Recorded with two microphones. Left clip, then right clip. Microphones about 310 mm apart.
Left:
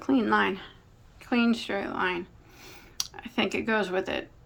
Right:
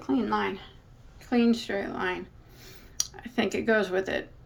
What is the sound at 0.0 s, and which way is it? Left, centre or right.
Speech, centre.